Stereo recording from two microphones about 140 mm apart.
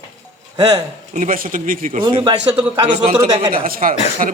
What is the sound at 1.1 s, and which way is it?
Speech, 70° right (ahead or behind).